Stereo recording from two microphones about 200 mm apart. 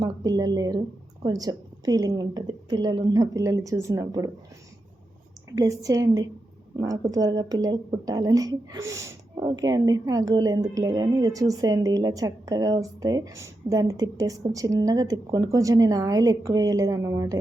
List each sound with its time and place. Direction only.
0.0 s a woman's voice: 20° right (ahead or behind)
5.5 s a woman's voice: 15° right (ahead or behind)